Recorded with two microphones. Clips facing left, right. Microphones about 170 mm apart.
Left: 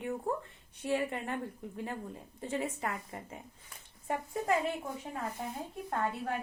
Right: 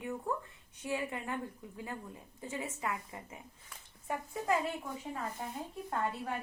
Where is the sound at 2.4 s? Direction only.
35° left (ahead or behind).